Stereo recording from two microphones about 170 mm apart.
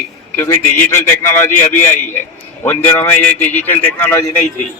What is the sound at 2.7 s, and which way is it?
A man's voice, 10° left (ahead or behind).